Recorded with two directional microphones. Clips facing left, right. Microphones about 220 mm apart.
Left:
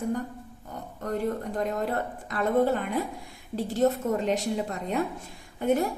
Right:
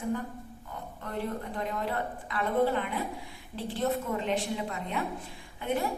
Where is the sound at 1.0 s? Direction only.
45° left (ahead or behind).